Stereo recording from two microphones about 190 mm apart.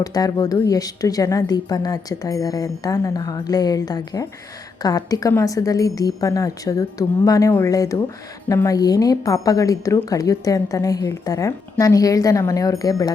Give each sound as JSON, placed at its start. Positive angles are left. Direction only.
{"t": 0.0, "sound": "a woman's voice", "side_deg": 20}